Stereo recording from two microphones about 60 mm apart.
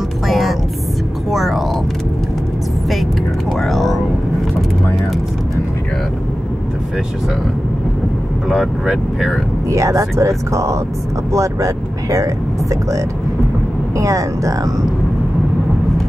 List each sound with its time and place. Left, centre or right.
0.3 s music: centre
1.3 s a sound: centre
3.5 s vehicle: centre
8.5 s speech: centre
9.7 s speech: right
13.9 s speech: right